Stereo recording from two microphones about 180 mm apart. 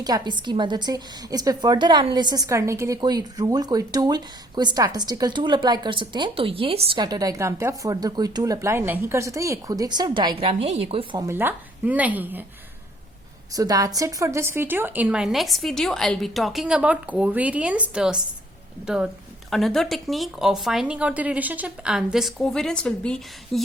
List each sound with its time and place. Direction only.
0.0 s a woman's voice: 25° right (ahead or behind)
11.2 s speech: 10° right (ahead or behind)
13.5 s a woman's voice: 20° right (ahead or behind); by 23.6 s 5° left (ahead or behind)